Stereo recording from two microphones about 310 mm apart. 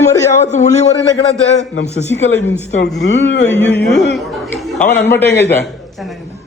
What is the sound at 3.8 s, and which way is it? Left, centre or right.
Speech, centre.